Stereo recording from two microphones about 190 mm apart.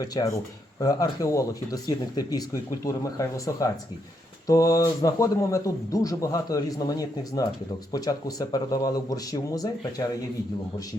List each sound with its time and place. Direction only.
0.0 s speech: 20° left (ahead or behind)